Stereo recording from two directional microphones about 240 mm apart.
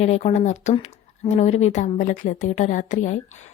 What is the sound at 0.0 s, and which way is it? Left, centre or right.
A woman's voice, left.